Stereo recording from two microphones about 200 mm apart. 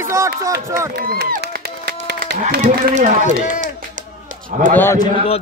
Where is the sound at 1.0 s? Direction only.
50° right (ahead or behind).